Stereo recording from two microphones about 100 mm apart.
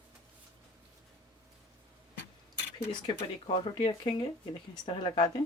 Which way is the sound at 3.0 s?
65° left (ahead or behind).